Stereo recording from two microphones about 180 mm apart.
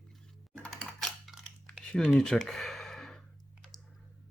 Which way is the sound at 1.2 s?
Centre (ahead or behind).